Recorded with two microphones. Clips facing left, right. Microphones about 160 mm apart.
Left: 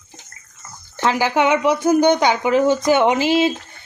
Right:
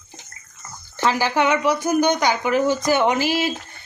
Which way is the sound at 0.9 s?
20° left (ahead or behind).